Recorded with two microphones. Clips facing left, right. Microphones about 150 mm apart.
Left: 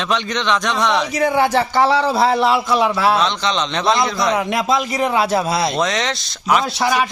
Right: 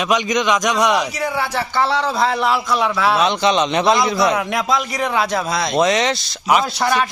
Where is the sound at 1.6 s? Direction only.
15° left (ahead or behind).